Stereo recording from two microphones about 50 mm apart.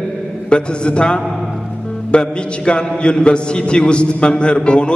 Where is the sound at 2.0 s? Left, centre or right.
Centre.